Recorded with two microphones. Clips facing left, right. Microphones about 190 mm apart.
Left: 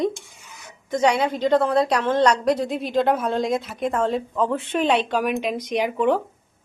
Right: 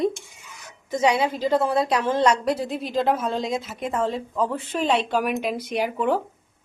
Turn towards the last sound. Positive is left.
turn(degrees=-5)  # may be behind; listen again after turning